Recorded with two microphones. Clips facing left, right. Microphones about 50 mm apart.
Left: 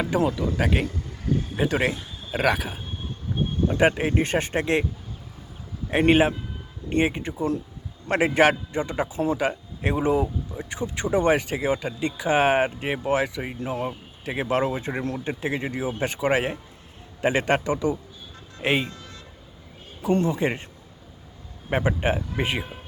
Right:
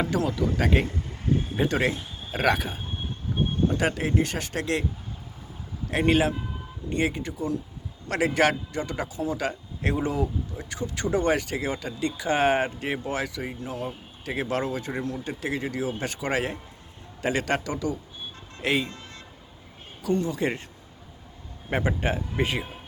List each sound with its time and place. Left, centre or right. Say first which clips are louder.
0.1 s speech: left 3 dB; left
0.3 s speech: even; centre
3.7 s speech: left 4 dB; left
5.9 s speech: left 4 dB; left
9.1 s speech: left 5 dB; left
9.4 s speech: left 4 dB; centre
13.6 s speech: left 7 dB; left
14.3 s speech: left 4 dB; centre
18.9 s music: left 1 dB; right
20.0 s speech: left 4 dB; left
20.3 s speech: left 2 dB; centre
21.7 s speech: left 3 dB; centre